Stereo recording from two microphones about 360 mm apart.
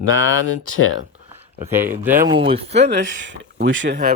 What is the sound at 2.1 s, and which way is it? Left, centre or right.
Speech, right.